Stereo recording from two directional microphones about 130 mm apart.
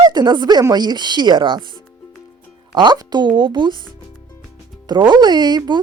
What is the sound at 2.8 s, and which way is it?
Speech, 35° right (ahead or behind).